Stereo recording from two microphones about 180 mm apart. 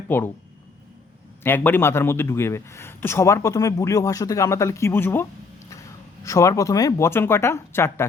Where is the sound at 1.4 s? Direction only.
10° left (ahead or behind).